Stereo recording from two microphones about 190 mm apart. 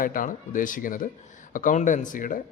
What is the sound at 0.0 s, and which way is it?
A man's voice, 45° left (ahead or behind).